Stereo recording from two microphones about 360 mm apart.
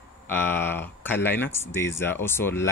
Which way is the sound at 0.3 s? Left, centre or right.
Centre.